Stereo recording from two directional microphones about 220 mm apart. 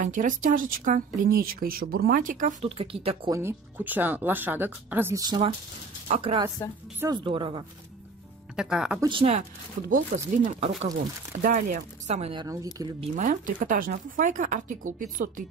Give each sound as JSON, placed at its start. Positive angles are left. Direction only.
{"t": 0.0, "sound": "speech", "side_deg": -35}
{"t": 3.3, "sound": "speech", "side_deg": -10}
{"t": 8.5, "sound": "speech", "side_deg": -5}
{"t": 9.0, "sound": "speech", "side_deg": -25}
{"t": 9.8, "sound": "speech", "side_deg": -35}
{"t": 13.1, "sound": "speech", "side_deg": -35}